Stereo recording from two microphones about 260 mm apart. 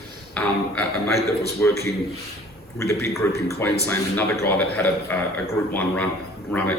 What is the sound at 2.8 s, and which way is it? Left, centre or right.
A man's voice, centre.